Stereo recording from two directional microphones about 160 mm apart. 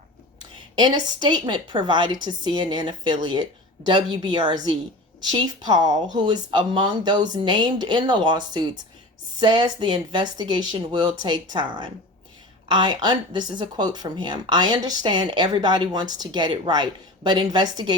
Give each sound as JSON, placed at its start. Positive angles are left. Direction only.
{"t": 0.8, "sound": "speech", "side_deg": -25}